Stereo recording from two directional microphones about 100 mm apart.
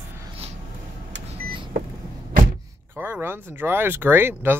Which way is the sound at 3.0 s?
20° right (ahead or behind).